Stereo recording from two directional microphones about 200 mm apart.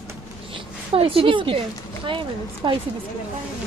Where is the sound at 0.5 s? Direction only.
25° right (ahead or behind).